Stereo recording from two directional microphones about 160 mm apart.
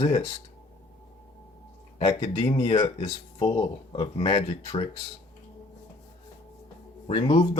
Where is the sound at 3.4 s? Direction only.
25° left (ahead or behind).